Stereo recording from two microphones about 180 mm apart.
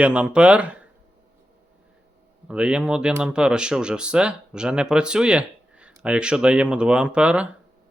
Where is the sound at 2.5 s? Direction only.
5° right (ahead or behind).